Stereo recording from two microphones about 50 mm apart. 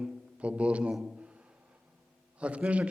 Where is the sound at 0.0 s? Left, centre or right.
Right.